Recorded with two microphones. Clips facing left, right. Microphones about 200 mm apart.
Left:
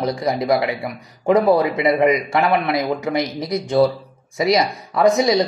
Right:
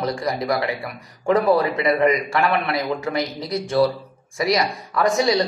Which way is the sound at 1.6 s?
20° left (ahead or behind).